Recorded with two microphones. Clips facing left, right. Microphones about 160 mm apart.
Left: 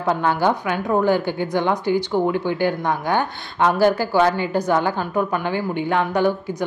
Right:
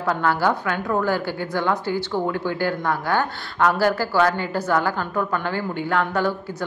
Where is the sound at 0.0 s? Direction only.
20° left (ahead or behind).